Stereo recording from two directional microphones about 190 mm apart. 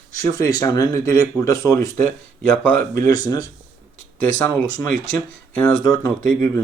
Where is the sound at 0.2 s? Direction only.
15° left (ahead or behind).